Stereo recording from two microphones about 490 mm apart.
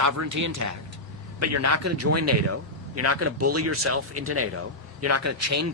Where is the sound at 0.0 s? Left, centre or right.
Right.